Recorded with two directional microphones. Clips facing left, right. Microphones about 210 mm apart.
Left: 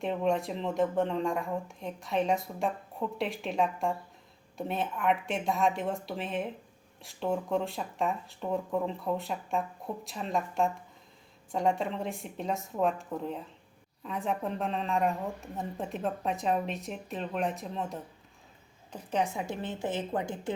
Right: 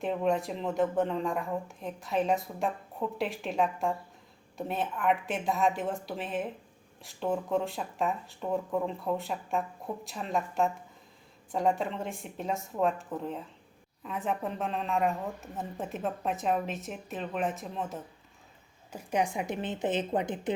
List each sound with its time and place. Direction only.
0.0 s a woman's voice: centre (ahead or behind); by 20.5 s 20° right (ahead or behind)